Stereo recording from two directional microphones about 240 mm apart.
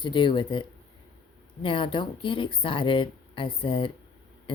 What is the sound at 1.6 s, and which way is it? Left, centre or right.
Speech, left.